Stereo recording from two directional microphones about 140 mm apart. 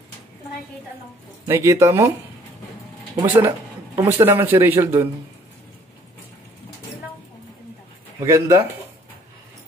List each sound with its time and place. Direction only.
1.5 s speech: 20° right (ahead or behind)
3.3 s speech: 15° right (ahead or behind)
8.2 s speech: 20° right (ahead or behind)